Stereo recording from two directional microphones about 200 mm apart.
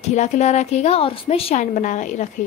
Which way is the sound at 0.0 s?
35° left (ahead or behind).